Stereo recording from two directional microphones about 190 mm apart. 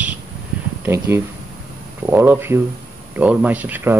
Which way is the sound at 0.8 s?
15° right (ahead or behind).